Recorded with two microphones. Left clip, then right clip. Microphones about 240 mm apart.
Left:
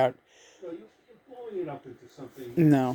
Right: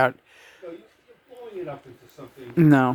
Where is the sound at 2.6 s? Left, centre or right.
Centre.